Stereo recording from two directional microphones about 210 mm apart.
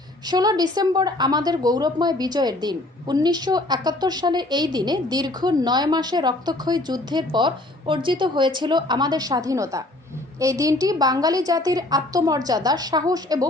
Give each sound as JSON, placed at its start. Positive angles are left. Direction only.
{"t": 0.3, "sound": "a woman's voice", "side_deg": -20}